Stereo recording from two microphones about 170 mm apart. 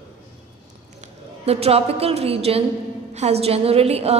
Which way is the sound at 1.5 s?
35° right (ahead or behind).